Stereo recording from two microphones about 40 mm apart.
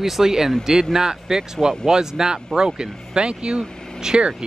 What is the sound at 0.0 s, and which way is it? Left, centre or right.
Speech, centre.